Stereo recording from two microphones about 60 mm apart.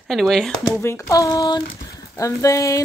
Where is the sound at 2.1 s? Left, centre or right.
Left.